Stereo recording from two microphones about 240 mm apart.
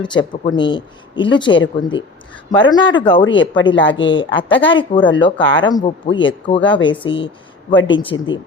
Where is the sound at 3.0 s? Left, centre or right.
Centre.